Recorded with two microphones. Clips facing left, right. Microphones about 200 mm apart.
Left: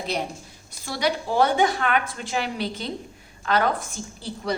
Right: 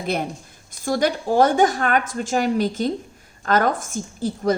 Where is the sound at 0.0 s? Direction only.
50° right (ahead or behind).